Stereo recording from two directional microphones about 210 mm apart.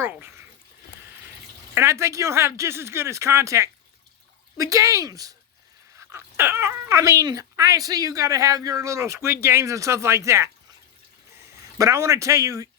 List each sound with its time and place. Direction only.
0.0 s speech: 10° right (ahead or behind)
1.7 s speech: 15° right (ahead or behind)
11.8 s speech: 15° right (ahead or behind)